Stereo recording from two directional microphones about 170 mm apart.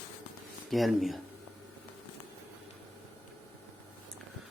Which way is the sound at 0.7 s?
Centre (ahead or behind).